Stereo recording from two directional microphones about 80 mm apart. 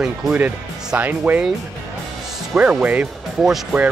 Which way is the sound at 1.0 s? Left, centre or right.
Right.